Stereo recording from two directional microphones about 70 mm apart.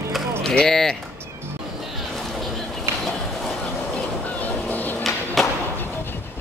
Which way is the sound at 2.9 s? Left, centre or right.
Right.